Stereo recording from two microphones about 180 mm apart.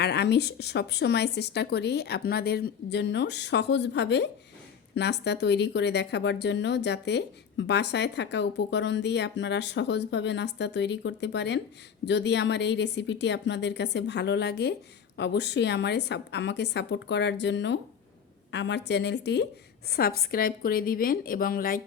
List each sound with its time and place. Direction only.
0.0 s a woman's voice: 65° left (ahead or behind)
19.9 s a woman's voice: 55° left (ahead or behind)